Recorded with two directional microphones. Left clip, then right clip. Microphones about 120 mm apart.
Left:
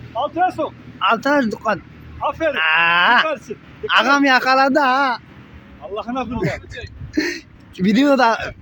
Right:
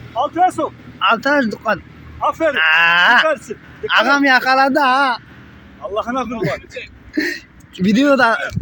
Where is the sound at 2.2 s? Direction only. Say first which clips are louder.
Right 3 dB; 10° right (ahead or behind).